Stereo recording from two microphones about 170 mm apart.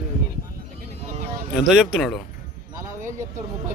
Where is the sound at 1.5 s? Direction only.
5° right (ahead or behind).